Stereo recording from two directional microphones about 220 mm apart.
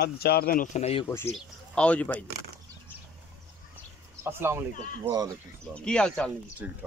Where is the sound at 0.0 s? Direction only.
45° left (ahead or behind); by 1.0 s 30° left (ahead or behind).